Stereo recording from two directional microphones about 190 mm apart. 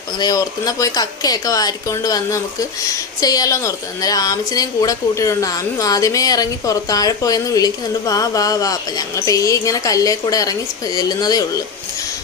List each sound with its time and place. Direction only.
0.2 s speech: 20° left (ahead or behind)